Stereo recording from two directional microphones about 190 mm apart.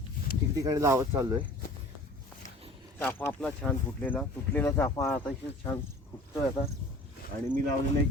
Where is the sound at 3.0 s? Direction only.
10° left (ahead or behind).